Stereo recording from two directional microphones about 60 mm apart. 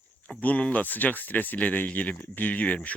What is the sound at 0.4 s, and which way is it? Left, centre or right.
Speech, left.